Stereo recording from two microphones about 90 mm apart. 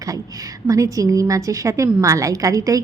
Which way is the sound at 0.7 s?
40° right (ahead or behind).